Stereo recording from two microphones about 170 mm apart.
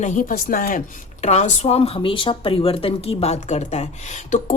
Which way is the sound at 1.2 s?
40° left (ahead or behind).